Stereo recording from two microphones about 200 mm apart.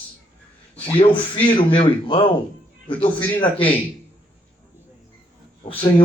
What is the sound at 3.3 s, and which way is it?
Speech, 25° left (ahead or behind).